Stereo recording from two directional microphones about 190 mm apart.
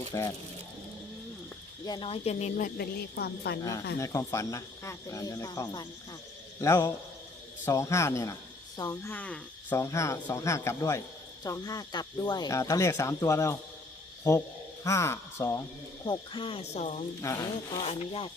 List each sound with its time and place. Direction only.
0.1 s speech: 15° left (ahead or behind)
1.8 s a woman's voice: 25° left (ahead or behind); by 3.6 s 60° left (ahead or behind)
3.6 s speech: 20° left (ahead or behind)
9.1 s speech: 10° left (ahead or behind)
16.0 s speech: 25° left (ahead or behind)
17.2 s speech: 15° left (ahead or behind)
17.8 s a woman's voice: 30° left (ahead or behind)